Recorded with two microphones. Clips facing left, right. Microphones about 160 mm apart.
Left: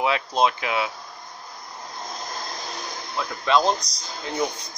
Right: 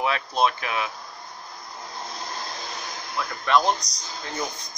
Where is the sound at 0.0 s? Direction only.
15° left (ahead or behind).